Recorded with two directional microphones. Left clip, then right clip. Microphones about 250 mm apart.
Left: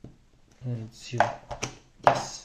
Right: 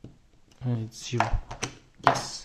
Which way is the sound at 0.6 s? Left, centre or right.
Right.